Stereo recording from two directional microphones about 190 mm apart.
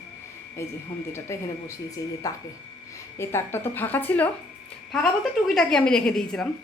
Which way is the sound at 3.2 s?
15° left (ahead or behind).